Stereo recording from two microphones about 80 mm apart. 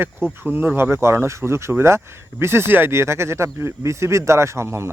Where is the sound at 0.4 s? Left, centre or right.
Right.